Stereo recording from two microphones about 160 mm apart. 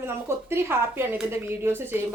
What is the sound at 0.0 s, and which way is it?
A woman's voice, 15° right (ahead or behind).